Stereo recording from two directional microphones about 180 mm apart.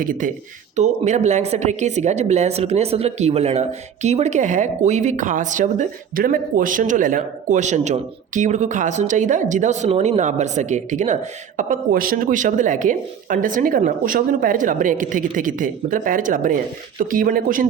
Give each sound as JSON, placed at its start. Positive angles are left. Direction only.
{"t": 0.0, "sound": "a woman's voice", "side_deg": -50}